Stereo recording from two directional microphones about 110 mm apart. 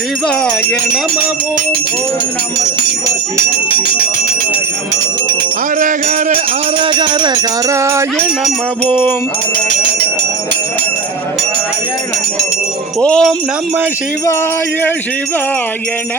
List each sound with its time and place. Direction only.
6.8 s speech: 45° right (ahead or behind)
7.7 s music: 25° right (ahead or behind)
13.0 s speech: 10° left (ahead or behind)